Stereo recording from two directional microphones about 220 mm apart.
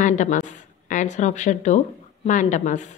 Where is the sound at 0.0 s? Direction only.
35° left (ahead or behind).